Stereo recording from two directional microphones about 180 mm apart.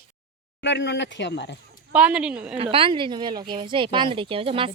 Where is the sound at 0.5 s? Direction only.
75° left (ahead or behind).